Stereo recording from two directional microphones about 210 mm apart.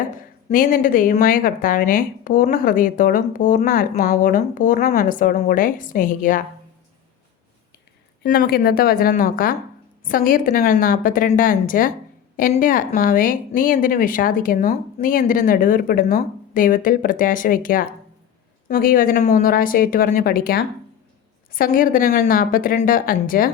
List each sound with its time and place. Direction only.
0.4 s speech: 40° left (ahead or behind)
8.2 s speech: 45° left (ahead or behind)